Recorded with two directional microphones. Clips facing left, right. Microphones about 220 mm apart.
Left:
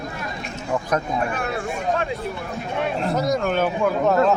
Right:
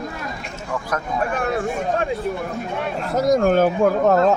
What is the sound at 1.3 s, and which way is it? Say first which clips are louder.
Speech: right 4 dB; 45° right (ahead or behind).